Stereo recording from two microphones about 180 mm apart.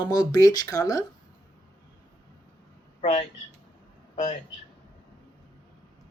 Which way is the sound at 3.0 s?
35° left (ahead or behind).